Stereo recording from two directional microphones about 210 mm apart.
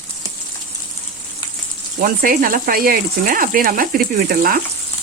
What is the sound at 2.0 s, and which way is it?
Speech, 40° right (ahead or behind).